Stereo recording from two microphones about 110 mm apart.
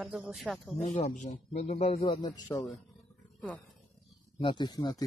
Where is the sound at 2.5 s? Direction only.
25° left (ahead or behind).